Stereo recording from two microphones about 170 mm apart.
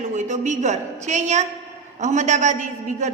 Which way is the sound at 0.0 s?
45° right (ahead or behind).